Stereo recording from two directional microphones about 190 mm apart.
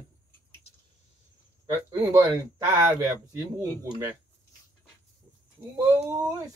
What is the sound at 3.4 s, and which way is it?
Speech, 20° right (ahead or behind).